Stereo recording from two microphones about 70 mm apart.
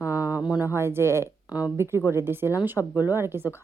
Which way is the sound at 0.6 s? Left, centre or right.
Right.